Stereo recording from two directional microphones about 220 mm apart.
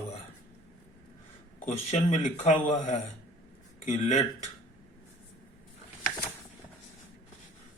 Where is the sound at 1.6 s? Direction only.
30° left (ahead or behind).